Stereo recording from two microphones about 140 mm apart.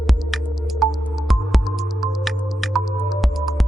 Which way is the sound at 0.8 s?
Centre (ahead or behind).